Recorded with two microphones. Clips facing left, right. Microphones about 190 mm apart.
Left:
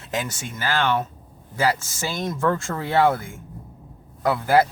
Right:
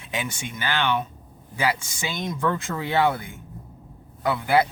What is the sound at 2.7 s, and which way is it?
Speech, 45° left (ahead or behind).